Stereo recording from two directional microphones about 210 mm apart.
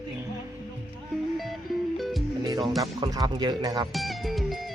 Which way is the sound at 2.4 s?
20° right (ahead or behind).